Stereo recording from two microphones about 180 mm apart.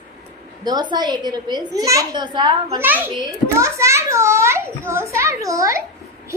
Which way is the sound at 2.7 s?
10° right (ahead or behind).